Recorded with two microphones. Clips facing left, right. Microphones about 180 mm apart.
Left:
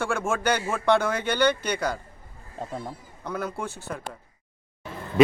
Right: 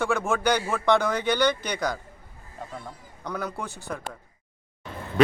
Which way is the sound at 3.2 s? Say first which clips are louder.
Left 1 dB; 5° left (ahead or behind).